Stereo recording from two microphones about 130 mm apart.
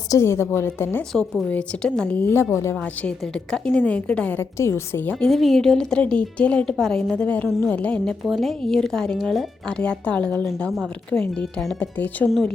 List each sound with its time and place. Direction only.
0.1 s a woman's voice: 20° left (ahead or behind)
1.1 s a woman's voice: 5° left (ahead or behind); by 2.7 s 20° left (ahead or behind)
3.0 s a woman's voice: 10° left (ahead or behind)
5.2 s a woman's voice: centre (ahead or behind)